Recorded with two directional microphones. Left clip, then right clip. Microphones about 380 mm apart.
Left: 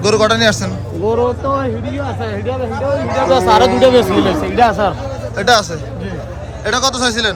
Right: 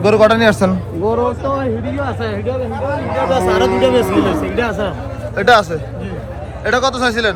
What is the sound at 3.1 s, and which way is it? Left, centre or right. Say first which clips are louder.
A man's voice: left 4 dB; left.